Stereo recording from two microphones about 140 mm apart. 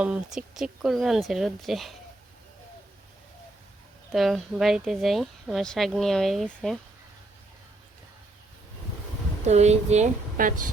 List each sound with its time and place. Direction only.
0.0 s speech: 5° right (ahead or behind)
4.1 s speech: centre (ahead or behind)
9.4 s speech: 50° right (ahead or behind)
10.3 s a woman's voice: 75° right (ahead or behind)